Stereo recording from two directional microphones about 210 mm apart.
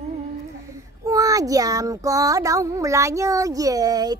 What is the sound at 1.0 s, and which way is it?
Child singing, 15° right (ahead or behind).